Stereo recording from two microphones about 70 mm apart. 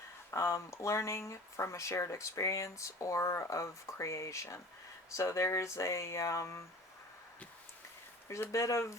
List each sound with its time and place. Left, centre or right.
0.3 s speech: left
8.3 s speech: left